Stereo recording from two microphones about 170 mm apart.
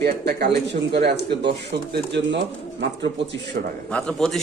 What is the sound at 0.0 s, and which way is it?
Speech, 70° right (ahead or behind).